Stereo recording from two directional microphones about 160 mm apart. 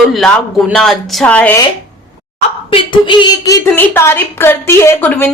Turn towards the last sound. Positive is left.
turn(degrees=10)  # may be behind; listen again after turning